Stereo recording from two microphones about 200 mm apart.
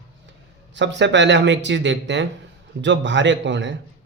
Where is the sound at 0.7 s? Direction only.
60° right (ahead or behind).